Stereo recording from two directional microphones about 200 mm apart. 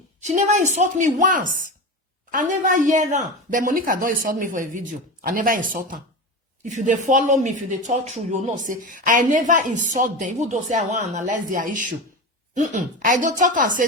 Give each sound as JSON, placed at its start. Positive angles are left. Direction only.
{"t": 0.2, "sound": "speech", "side_deg": -35}